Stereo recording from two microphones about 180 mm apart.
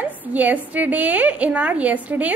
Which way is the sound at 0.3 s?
10° right (ahead or behind).